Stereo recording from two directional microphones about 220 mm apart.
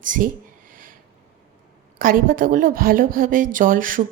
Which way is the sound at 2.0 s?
40° right (ahead or behind).